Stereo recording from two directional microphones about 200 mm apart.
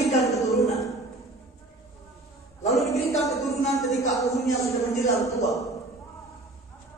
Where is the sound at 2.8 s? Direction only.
Centre (ahead or behind).